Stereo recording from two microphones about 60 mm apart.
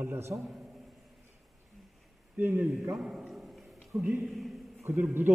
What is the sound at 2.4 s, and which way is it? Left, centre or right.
Speech, right.